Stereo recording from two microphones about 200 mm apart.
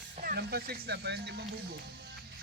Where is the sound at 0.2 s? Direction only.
50° right (ahead or behind).